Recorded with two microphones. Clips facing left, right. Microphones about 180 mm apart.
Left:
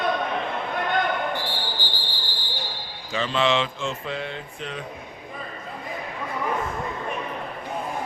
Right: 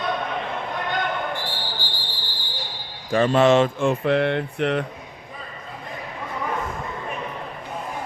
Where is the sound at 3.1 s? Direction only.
50° right (ahead or behind); by 4.8 s 65° right (ahead or behind).